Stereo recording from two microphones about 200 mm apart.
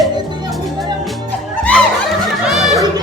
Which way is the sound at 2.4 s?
Centre (ahead or behind).